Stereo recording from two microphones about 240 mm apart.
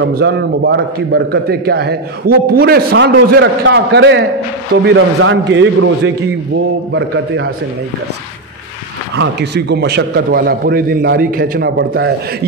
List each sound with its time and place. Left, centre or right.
0.1 s a man's voice: right
9.1 s a man's voice: right